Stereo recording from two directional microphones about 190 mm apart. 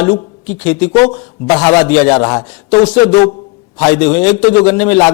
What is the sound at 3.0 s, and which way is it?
Speech, 40° left (ahead or behind).